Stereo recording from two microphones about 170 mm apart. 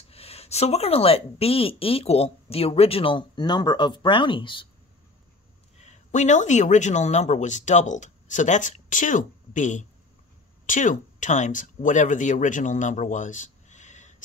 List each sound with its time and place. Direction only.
0.1 s a woman's voice: 35° left (ahead or behind)
5.8 s speech: 45° left (ahead or behind)